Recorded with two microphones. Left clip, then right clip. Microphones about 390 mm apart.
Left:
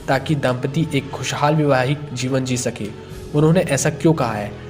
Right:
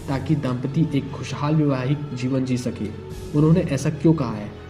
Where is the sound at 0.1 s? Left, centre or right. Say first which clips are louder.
Left 7 dB; left.